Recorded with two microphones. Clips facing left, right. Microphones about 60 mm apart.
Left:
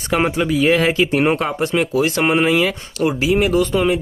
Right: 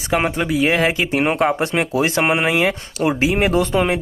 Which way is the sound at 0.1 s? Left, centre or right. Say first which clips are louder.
Left 1 dB; centre.